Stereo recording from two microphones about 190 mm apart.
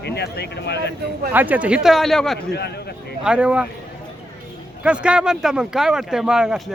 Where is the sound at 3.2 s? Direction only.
5° right (ahead or behind).